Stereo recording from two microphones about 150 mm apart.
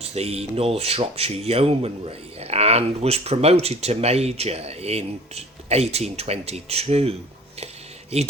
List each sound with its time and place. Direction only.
0.0 s speech: 45° right (ahead or behind)